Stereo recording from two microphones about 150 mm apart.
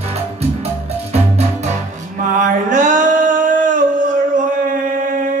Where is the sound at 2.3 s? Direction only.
55° right (ahead or behind).